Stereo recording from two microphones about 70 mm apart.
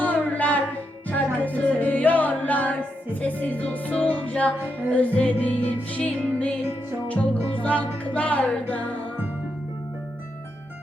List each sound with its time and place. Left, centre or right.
0.0 s music: left